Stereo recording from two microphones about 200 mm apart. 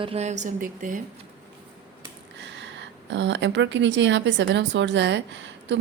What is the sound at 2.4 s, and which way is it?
Speech, 65° right (ahead or behind).